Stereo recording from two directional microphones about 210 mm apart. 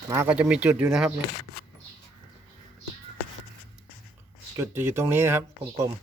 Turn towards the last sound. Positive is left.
turn(degrees=-10)  # may be behind; listen again after turning